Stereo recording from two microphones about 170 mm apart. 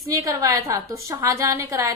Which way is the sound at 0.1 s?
20° right (ahead or behind).